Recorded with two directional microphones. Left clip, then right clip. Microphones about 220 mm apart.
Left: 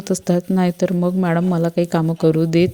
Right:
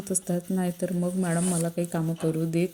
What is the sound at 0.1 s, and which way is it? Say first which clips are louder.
A woman's voice: left 11 dB; 40° left (ahead or behind).